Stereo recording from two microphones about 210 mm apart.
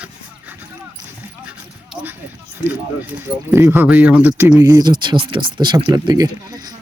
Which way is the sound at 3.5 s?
10° right (ahead or behind).